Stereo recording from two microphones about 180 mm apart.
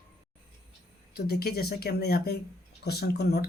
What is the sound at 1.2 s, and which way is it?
Speech, 60° left (ahead or behind).